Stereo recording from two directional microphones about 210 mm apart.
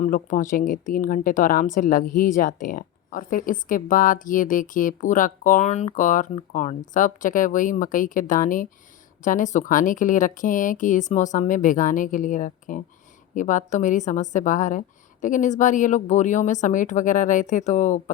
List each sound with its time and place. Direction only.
0.0 s speech: 40° left (ahead or behind)